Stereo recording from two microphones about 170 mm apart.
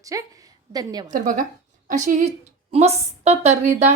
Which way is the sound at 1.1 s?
55° right (ahead or behind).